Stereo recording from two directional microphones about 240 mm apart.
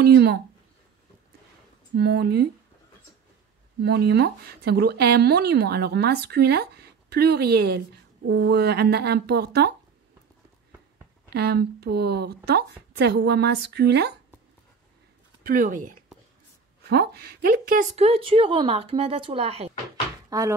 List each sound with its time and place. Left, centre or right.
0.0 s speech: right
2.0 s speech: right
3.8 s speech: right
11.2 s speech: right
15.4 s speech: right
16.9 s a woman's voice: right
20.2 s speech: centre